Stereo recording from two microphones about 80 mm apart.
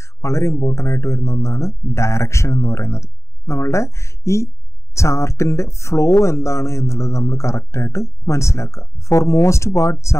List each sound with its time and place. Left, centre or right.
0.0 s speech: left